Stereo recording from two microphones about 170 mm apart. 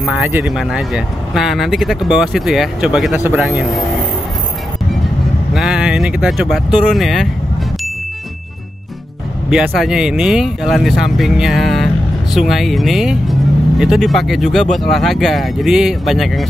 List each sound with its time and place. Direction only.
0.0 s speech: 10° right (ahead or behind)
5.5 s speech: 5° right (ahead or behind)
9.5 s speech: 5° right (ahead or behind)